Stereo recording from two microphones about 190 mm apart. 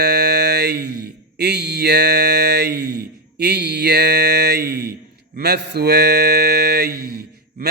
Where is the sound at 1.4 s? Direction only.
60° right (ahead or behind).